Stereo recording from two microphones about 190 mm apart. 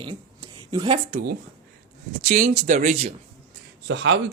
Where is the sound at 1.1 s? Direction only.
50° right (ahead or behind).